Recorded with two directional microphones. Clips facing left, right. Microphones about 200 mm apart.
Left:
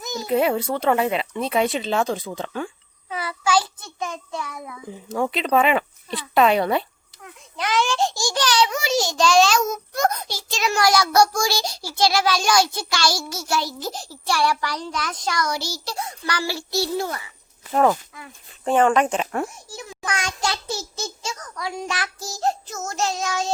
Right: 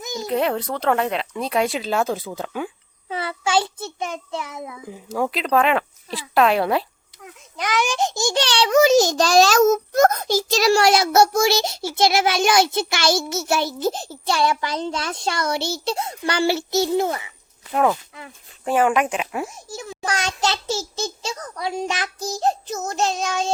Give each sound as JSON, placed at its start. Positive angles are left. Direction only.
{"t": 0.2, "sound": "speech", "side_deg": 0}
{"t": 3.1, "sound": "a child's voice", "side_deg": -25}
{"t": 4.9, "sound": "speech", "side_deg": -5}
{"t": 7.6, "sound": "a child's voice", "side_deg": -15}
{"t": 17.7, "sound": "speech", "side_deg": 0}
{"t": 19.7, "sound": "a child's voice", "side_deg": -30}